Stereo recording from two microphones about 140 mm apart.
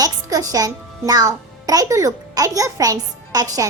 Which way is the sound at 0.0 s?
25° right (ahead or behind).